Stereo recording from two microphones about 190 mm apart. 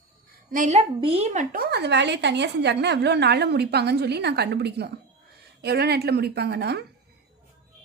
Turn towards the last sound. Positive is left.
turn(degrees=-55)  # may be behind; listen again after turning